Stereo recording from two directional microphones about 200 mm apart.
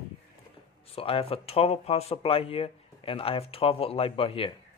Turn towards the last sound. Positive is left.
turn(degrees=25)  # may be behind; listen again after turning